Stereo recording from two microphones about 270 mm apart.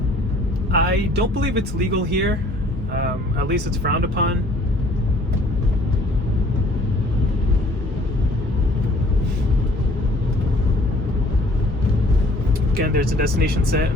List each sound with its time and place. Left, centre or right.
0.9 s speech: right
3.5 s speech: right
12.7 s speech: right